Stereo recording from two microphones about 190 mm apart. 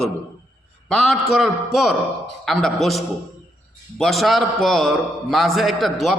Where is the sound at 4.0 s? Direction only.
Centre (ahead or behind).